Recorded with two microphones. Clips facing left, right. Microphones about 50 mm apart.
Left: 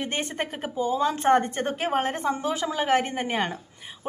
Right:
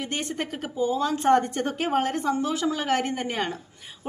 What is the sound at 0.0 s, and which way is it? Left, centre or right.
A woman's voice, left.